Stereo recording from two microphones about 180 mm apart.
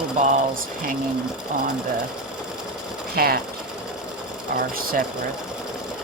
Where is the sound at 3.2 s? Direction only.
55° right (ahead or behind).